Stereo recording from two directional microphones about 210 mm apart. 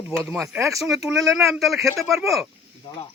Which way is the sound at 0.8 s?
Centre (ahead or behind).